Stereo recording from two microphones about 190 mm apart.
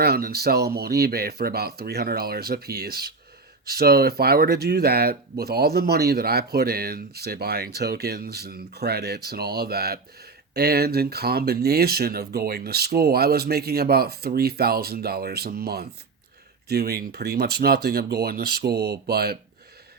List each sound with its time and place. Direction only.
0.0 s speech: 55° right (ahead or behind)